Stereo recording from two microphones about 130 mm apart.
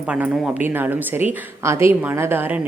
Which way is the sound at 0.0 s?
10° right (ahead or behind).